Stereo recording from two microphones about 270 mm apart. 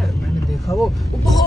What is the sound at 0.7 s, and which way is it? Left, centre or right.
Speech, centre.